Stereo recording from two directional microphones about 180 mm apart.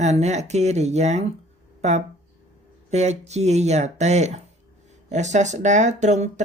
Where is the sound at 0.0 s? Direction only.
40° right (ahead or behind).